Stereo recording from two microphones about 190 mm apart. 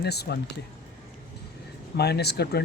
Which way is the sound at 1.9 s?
60° left (ahead or behind).